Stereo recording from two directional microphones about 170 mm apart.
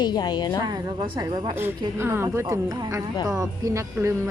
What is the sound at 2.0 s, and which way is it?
Speech, 15° right (ahead or behind).